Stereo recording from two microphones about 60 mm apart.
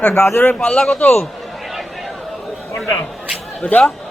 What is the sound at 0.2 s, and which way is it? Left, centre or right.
Speech, left.